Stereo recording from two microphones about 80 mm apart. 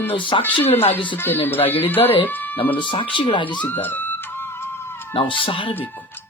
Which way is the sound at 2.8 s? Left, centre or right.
Left.